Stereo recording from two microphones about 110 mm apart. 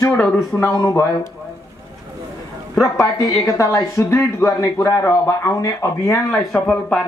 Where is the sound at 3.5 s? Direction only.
30° left (ahead or behind).